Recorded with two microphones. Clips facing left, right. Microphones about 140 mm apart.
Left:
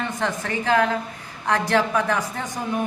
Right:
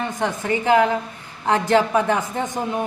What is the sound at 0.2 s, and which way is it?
A woman's voice, 20° right (ahead or behind).